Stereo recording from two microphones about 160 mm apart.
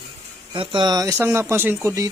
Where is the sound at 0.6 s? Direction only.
30° right (ahead or behind).